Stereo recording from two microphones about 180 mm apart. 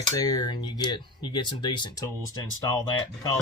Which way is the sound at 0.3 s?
25° left (ahead or behind).